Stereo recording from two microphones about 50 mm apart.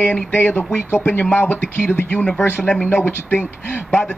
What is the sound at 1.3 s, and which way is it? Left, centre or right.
Speech, left.